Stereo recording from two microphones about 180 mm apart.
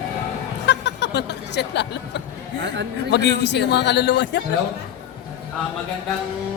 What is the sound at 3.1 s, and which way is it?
A man's voice, 70° left (ahead or behind).